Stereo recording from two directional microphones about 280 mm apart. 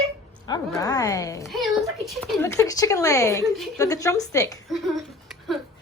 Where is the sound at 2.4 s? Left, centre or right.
Centre.